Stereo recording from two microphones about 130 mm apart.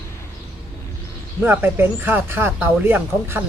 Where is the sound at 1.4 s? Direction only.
15° right (ahead or behind).